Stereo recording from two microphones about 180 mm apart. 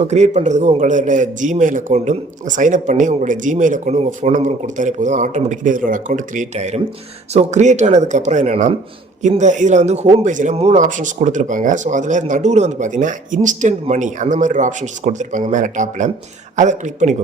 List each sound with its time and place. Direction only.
0.1 s speech: 40° right (ahead or behind)